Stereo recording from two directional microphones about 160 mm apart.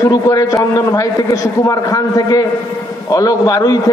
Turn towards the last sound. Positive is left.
turn(degrees=25)  # may be behind; listen again after turning